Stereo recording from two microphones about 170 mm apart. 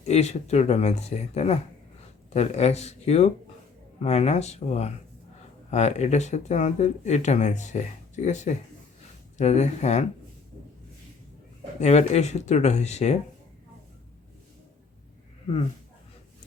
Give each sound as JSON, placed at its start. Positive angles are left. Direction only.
{"t": 0.0, "sound": "speech", "side_deg": 40}
{"t": 11.8, "sound": "speech", "side_deg": 40}